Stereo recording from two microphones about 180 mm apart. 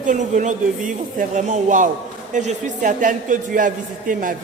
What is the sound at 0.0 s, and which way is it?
A man's voice, 45° right (ahead or behind).